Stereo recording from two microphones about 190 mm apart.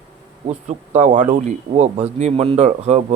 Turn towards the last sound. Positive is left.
turn(degrees=-35)  # may be behind; listen again after turning